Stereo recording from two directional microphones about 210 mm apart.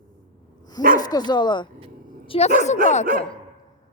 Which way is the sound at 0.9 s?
20° left (ahead or behind).